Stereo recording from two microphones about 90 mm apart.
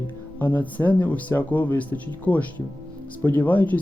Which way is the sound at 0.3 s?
20° left (ahead or behind).